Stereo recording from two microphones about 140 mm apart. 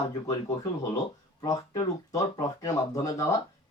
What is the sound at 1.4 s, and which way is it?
Speech, 30° left (ahead or behind).